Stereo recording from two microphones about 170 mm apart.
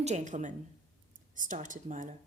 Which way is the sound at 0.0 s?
45° right (ahead or behind).